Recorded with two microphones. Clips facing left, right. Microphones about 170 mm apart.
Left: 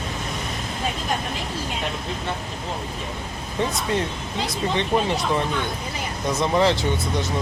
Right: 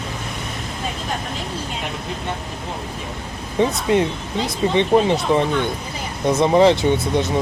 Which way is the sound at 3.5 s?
15° right (ahead or behind).